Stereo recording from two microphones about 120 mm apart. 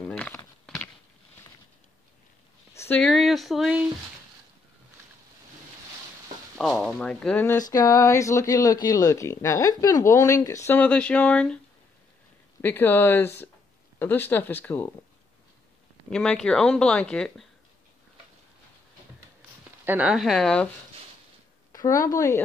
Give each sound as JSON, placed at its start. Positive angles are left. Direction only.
{"t": 0.7, "sound": "a sound", "side_deg": 5}
{"t": 2.7, "sound": "a sound", "side_deg": 20}
{"t": 3.0, "sound": "a sound", "side_deg": 0}
{"t": 6.6, "sound": "speech", "side_deg": 0}
{"t": 7.7, "sound": "speech", "side_deg": 30}
{"t": 10.7, "sound": "speech", "side_deg": 10}
{"t": 12.6, "sound": "speech", "side_deg": 15}
{"t": 16.1, "sound": "speech", "side_deg": 5}
{"t": 19.8, "sound": "speech", "side_deg": -15}
{"t": 21.7, "sound": "speech", "side_deg": 25}